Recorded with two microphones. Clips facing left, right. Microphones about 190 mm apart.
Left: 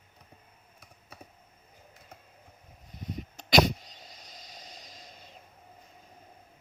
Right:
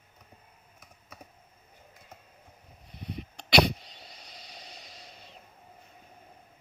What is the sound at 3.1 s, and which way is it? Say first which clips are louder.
Sneeze: left 1 dB; 45° left (ahead or behind).